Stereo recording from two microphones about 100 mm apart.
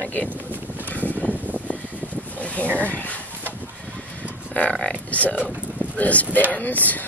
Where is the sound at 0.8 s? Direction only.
15° left (ahead or behind).